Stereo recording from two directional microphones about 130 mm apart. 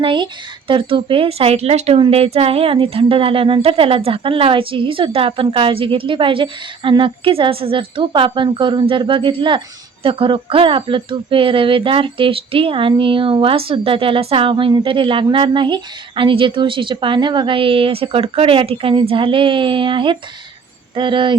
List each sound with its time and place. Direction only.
0.0 s speech: 40° right (ahead or behind)